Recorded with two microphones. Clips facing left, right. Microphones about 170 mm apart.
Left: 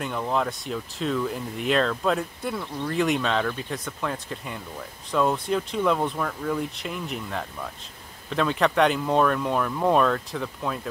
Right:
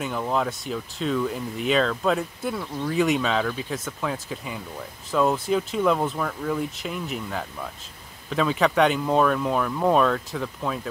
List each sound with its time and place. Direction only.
0.0 s speech: centre (ahead or behind)